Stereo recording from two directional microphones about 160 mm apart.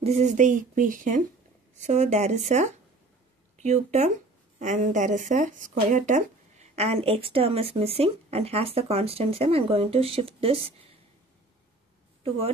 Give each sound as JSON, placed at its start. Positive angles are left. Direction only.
{"t": 0.0, "sound": "speech", "side_deg": -45}